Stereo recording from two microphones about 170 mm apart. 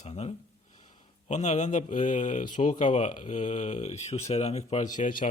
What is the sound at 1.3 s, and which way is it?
Speech, 45° left (ahead or behind).